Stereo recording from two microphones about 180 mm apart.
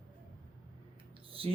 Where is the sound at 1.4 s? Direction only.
30° right (ahead or behind).